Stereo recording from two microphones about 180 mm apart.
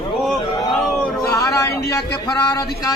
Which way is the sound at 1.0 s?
15° left (ahead or behind).